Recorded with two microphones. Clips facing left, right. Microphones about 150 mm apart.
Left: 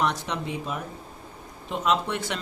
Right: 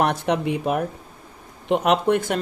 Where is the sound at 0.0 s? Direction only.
60° right (ahead or behind).